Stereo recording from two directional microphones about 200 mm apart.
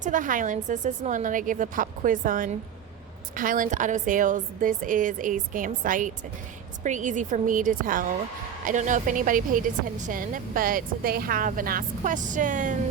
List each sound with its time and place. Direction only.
0.0 s a woman's voice: 40° right (ahead or behind)